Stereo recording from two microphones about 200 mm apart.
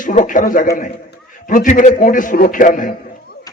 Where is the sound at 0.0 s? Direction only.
40° left (ahead or behind).